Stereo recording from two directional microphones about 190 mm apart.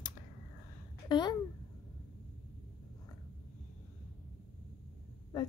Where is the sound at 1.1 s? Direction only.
25° left (ahead or behind).